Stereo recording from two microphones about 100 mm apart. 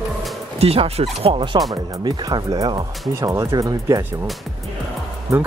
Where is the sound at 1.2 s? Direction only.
60° right (ahead or behind).